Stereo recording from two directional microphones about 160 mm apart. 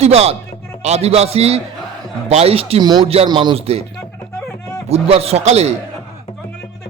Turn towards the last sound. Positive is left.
turn(degrees=-40)  # may be behind; listen again after turning